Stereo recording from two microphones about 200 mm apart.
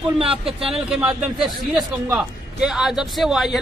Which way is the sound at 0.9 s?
5° right (ahead or behind).